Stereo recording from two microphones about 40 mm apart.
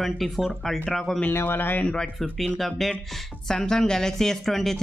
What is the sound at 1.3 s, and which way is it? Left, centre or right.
Speech, left.